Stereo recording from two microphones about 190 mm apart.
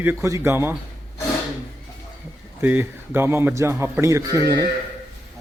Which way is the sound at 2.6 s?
10° right (ahead or behind).